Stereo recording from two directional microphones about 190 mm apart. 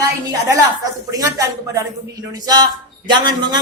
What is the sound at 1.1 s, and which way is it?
A man's voice, 20° right (ahead or behind).